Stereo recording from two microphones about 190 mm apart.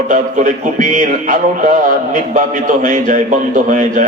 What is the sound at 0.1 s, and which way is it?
Speech, 45° right (ahead or behind).